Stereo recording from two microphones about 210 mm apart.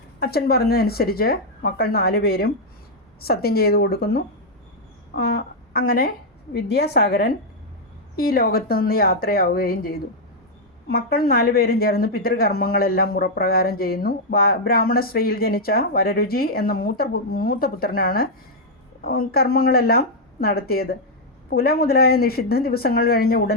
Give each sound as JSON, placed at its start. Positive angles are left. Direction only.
{"t": 0.2, "sound": "a woman's voice", "side_deg": 45}